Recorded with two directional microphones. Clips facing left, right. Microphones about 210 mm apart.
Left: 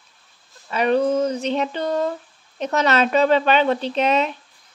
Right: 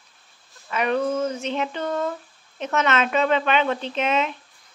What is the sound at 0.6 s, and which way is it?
Speech, 30° left (ahead or behind).